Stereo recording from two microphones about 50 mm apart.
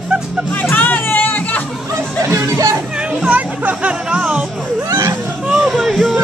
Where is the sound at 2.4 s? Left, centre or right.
Right.